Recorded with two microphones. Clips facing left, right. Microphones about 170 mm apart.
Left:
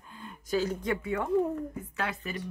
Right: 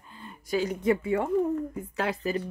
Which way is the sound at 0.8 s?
25° right (ahead or behind).